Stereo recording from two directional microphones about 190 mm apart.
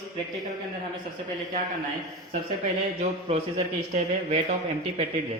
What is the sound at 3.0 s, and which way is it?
Speech, 35° right (ahead or behind).